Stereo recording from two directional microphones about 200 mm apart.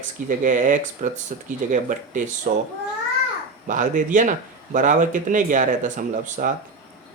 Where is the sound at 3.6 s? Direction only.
40° right (ahead or behind).